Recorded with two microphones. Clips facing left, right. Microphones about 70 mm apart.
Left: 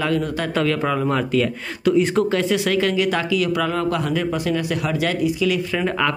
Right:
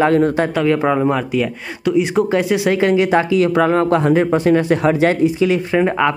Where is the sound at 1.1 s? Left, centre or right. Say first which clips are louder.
Right 1 dB; centre.